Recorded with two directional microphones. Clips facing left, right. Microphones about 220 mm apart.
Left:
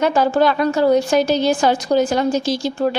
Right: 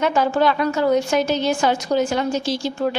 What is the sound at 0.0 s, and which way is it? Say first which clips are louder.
A woman's voice: left 3 dB; 35° left (ahead or behind).